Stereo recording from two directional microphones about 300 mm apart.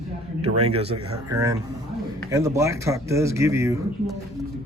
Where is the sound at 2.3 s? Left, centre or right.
Centre.